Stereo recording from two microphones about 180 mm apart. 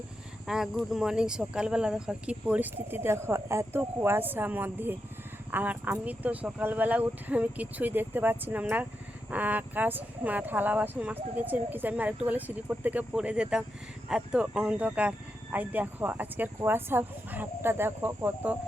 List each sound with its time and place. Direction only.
0.4 s speech: centre (ahead or behind)